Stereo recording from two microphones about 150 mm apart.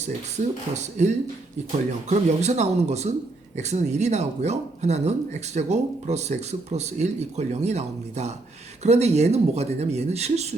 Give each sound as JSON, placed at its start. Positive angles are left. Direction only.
{"t": 0.3, "sound": "speech", "side_deg": -50}